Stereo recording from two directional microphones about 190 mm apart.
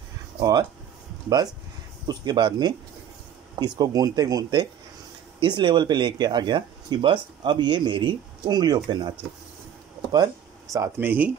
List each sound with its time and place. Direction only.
0.4 s speech: 20° right (ahead or behind)
2.0 s speech: 25° right (ahead or behind)
10.1 s speech: 20° right (ahead or behind)